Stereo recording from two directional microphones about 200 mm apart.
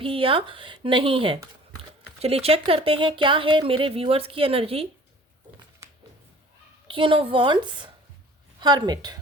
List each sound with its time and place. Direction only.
0.0 s speech: 25° right (ahead or behind)
6.8 s a woman's voice: 25° right (ahead or behind)